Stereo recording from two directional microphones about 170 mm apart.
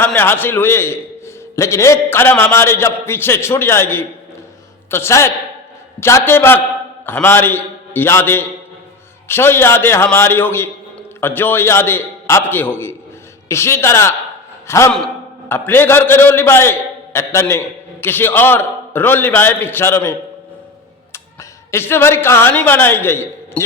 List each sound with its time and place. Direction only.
0.0 s a man's voice: 10° left (ahead or behind)
21.7 s a man's voice: 15° left (ahead or behind)